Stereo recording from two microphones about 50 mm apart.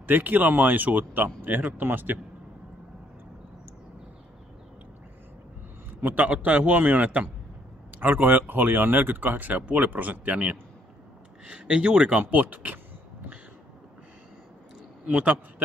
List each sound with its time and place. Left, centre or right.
0.0 s speech: right
6.1 s speech: right
15.0 s speech: right